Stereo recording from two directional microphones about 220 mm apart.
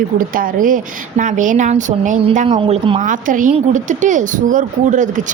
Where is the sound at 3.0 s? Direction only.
35° right (ahead or behind).